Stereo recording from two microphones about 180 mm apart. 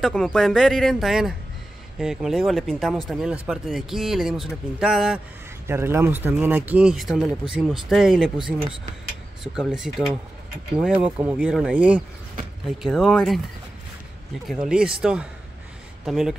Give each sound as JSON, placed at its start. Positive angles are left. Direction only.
{"t": 0.0, "sound": "speech", "side_deg": 0}
{"t": 5.7, "sound": "speech", "side_deg": -15}
{"t": 9.4, "sound": "speech", "side_deg": -5}
{"t": 14.5, "sound": "speech", "side_deg": -5}